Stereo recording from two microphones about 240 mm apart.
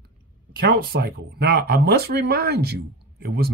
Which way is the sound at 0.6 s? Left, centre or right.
Right.